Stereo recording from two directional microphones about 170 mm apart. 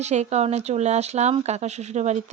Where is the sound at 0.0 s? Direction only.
40° right (ahead or behind).